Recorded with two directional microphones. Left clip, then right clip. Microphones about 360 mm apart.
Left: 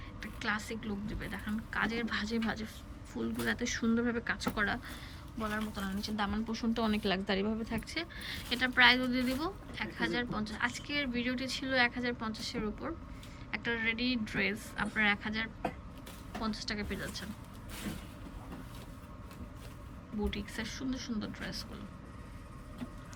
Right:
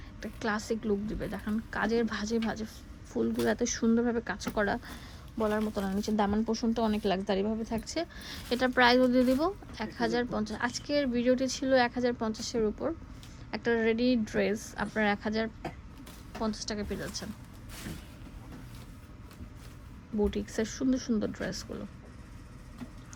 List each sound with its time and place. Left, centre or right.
0.2 s a woman's voice: centre
20.5 s speech: centre